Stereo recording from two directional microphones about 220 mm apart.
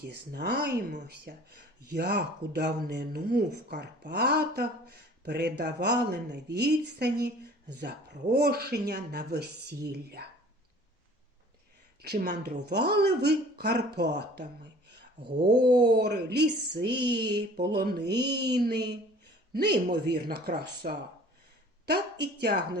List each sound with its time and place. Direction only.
0.0 s speech: 50° right (ahead or behind)
12.0 s speech: 40° right (ahead or behind)
16.0 s speech: 50° right (ahead or behind)